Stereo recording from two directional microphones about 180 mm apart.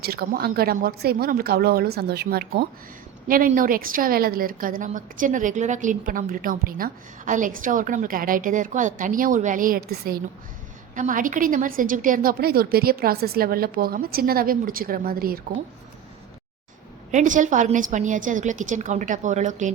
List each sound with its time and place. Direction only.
0.0 s a woman's voice: 60° right (ahead or behind)
17.1 s a woman's voice: 45° right (ahead or behind)